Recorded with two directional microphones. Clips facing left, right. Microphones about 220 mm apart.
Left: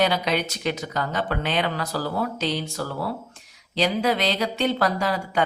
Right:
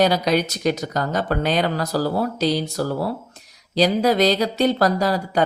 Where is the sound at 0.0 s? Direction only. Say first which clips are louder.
Right 5 dB; 40° right (ahead or behind).